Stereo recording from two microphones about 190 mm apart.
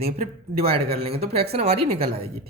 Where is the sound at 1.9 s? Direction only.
50° right (ahead or behind).